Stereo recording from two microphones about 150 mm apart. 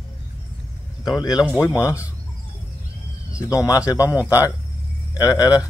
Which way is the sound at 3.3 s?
20° left (ahead or behind).